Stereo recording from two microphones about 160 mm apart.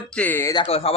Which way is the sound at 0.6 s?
40° left (ahead or behind).